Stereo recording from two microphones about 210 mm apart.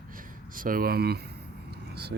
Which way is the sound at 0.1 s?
40° right (ahead or behind).